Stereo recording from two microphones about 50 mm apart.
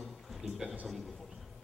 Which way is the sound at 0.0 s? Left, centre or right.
Centre.